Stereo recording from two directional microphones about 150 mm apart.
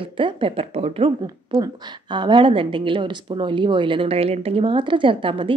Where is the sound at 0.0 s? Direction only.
35° right (ahead or behind).